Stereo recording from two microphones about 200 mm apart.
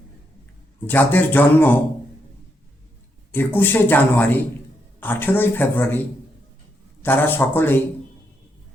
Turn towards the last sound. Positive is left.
turn(degrees=10)  # may be behind; listen again after turning